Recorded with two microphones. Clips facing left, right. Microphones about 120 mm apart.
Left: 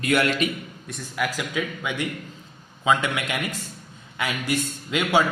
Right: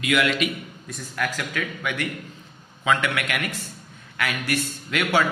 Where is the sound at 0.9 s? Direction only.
Centre (ahead or behind).